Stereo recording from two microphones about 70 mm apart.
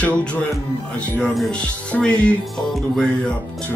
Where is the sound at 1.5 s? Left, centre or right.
Centre.